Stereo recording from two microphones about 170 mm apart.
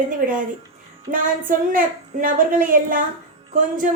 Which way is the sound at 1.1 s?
55° right (ahead or behind).